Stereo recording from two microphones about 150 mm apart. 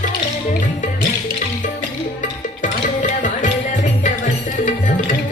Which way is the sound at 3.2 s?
55° left (ahead or behind).